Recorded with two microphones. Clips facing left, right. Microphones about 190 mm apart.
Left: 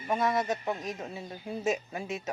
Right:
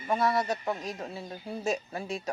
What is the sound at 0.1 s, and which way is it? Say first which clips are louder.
Speech: right 1 dB; 20° left (ahead or behind).